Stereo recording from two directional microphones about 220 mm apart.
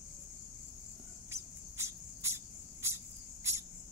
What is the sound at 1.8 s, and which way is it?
Cricket, 10° right (ahead or behind).